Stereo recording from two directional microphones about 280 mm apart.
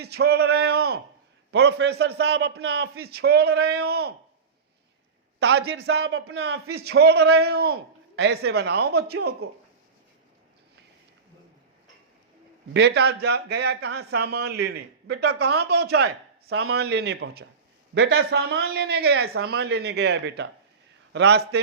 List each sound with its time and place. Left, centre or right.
0.0 s a man's voice: right
5.4 s a man's voice: right
12.7 s a man's voice: right
16.0 s speech: right
16.7 s a man's voice: right